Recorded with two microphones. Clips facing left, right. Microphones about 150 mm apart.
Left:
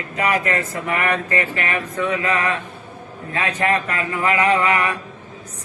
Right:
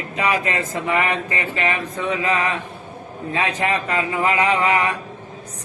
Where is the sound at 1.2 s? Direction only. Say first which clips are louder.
Even; 20° right (ahead or behind).